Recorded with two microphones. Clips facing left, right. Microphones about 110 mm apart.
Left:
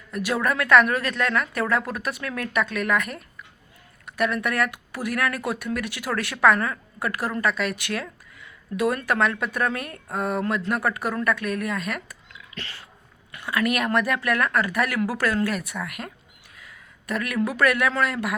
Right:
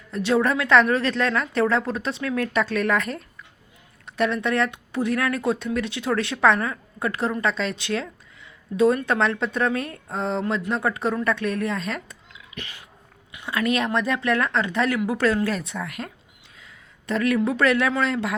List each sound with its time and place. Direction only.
0.1 s speech: 25° right (ahead or behind)
12.5 s dog: 20° right (ahead or behind)
13.3 s a man's voice: 25° right (ahead or behind)